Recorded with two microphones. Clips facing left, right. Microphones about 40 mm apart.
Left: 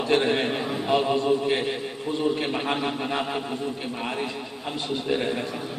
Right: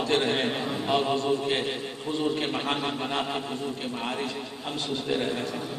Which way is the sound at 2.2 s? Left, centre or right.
Centre.